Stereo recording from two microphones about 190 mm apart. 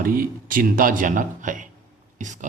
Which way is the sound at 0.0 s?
50° right (ahead or behind).